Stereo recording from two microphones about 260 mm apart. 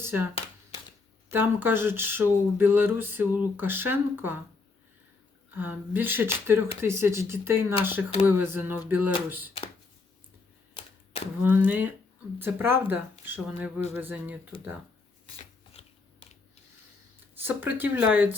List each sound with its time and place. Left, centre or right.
0.0 s speech: centre
1.3 s speech: centre
5.5 s speech: centre
11.4 s speech: centre
15.8 s biting: left
17.3 s speech: centre